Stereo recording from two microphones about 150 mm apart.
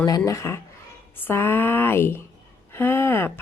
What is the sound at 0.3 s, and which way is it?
Speech, 20° left (ahead or behind).